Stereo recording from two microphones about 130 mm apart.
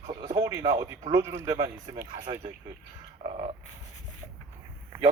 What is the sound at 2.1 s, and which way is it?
Speech, 40° right (ahead or behind).